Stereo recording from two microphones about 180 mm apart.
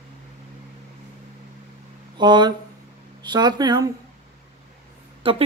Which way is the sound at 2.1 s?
25° right (ahead or behind).